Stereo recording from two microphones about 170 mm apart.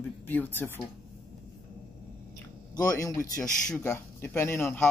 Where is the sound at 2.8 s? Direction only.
20° left (ahead or behind).